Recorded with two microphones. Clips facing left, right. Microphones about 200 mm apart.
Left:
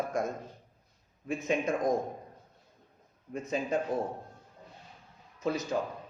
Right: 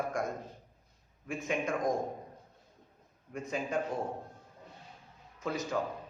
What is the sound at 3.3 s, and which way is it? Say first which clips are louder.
Speech: left 3 dB; 20° left (ahead or behind).